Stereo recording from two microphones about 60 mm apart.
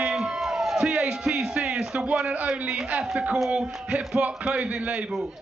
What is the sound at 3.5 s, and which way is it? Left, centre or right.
Speech, right.